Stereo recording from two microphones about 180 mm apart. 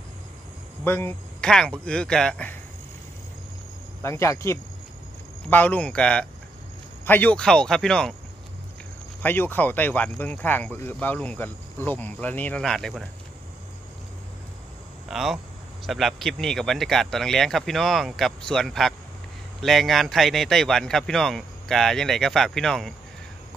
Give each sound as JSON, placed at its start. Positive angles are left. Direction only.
{"t": 0.8, "sound": "speech", "side_deg": 10}
{"t": 4.0, "sound": "speech", "side_deg": 15}
{"t": 9.2, "sound": "speech", "side_deg": 10}
{"t": 15.0, "sound": "speech", "side_deg": 0}